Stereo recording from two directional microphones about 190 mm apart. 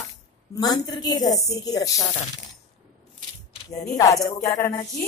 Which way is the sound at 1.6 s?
20° left (ahead or behind).